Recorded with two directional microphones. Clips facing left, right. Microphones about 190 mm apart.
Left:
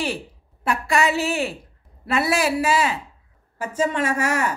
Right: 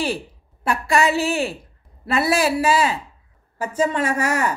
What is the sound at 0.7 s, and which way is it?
Speech, 35° right (ahead or behind).